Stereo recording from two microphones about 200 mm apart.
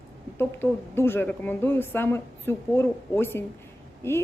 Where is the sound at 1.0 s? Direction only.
10° left (ahead or behind).